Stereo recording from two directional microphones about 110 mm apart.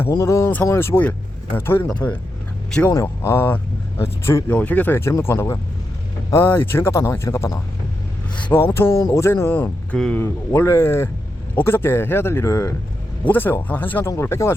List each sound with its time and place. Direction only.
0.1 s speech: 30° left (ahead or behind)
13.2 s speech: 20° left (ahead or behind)